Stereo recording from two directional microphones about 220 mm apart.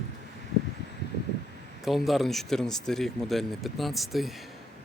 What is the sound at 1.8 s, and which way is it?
Speech, centre (ahead or behind).